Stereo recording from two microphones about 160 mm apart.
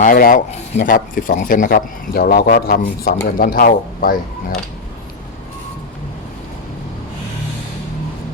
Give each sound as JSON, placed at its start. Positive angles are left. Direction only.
{"t": 0.0, "sound": "speech", "side_deg": 60}